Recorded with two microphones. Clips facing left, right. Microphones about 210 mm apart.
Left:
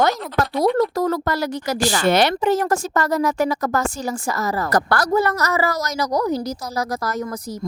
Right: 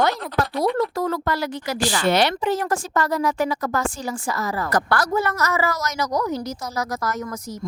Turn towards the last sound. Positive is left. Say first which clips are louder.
# left 2 dB
turn(degrees=35)  # may be behind; listen again after turning